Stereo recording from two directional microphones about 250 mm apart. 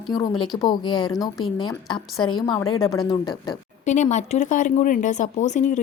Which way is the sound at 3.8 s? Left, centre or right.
Left.